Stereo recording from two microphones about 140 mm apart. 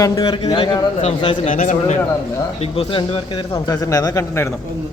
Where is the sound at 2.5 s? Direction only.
45° left (ahead or behind).